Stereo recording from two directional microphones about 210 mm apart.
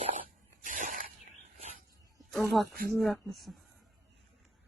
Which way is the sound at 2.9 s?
Centre (ahead or behind).